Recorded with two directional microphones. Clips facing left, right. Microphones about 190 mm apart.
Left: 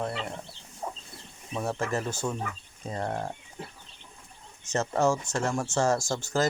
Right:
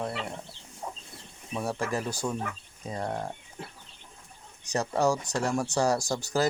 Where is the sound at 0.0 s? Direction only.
10° right (ahead or behind).